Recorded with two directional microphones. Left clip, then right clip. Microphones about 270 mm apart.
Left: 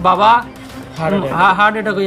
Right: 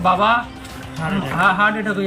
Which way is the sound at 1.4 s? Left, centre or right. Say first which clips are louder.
Left 4 dB; centre.